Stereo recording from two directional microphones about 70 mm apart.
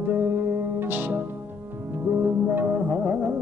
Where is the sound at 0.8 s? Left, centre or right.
Right.